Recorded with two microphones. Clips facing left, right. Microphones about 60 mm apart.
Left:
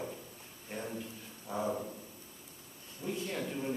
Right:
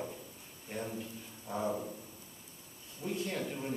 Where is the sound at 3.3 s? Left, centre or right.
Centre.